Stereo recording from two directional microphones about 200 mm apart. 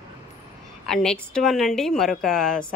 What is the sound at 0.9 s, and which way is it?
Speech, 5° left (ahead or behind).